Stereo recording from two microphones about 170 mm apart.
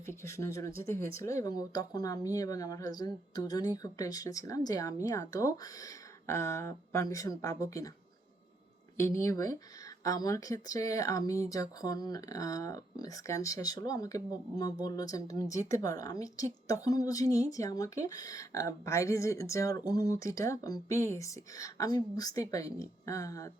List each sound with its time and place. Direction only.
0.0 s a woman's voice: 15° left (ahead or behind)
9.0 s a woman's voice: 15° left (ahead or behind)